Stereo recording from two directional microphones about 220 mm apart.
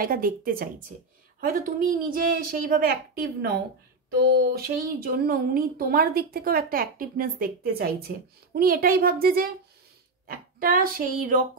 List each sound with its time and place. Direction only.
0.0 s a woman's voice: 40° right (ahead or behind)
2.1 s a woman's voice: 40° right (ahead or behind)